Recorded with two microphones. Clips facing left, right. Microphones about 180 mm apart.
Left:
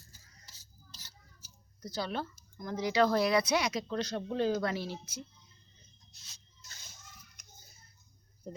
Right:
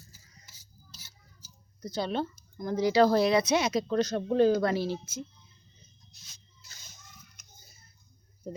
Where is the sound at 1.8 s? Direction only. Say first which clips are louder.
Right 5 dB; 20° right (ahead or behind).